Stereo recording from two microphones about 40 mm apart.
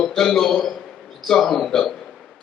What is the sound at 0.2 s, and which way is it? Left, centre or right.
A man's voice, centre.